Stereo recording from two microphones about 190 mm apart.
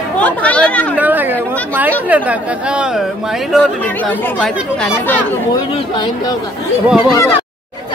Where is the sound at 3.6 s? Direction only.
10° left (ahead or behind).